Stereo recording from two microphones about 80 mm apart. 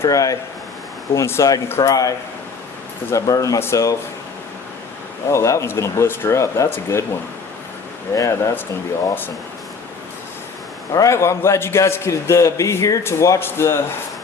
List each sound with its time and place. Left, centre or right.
0.0 s a man's voice: left
5.3 s a man's voice: left
8.1 s a man's voice: left
10.9 s a man's voice: left